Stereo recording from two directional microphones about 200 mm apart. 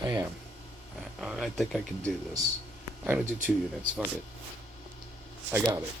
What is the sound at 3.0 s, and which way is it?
Speech, 5° right (ahead or behind).